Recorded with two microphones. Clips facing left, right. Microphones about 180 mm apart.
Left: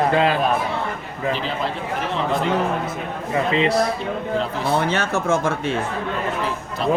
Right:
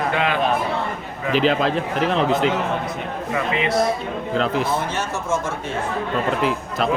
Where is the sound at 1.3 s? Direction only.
90° right.